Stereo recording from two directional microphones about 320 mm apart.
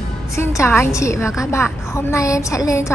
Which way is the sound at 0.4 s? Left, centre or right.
Centre.